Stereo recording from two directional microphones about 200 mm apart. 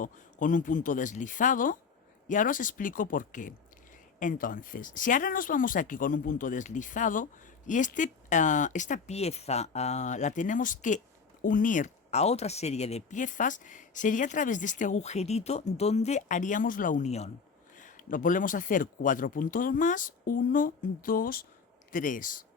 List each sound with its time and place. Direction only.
0.0 s speech: 40° left (ahead or behind)